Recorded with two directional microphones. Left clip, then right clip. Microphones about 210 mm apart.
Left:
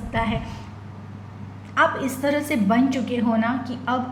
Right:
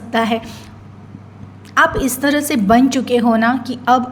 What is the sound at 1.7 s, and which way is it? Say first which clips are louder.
A woman's voice: right 6 dB; 45° right (ahead or behind).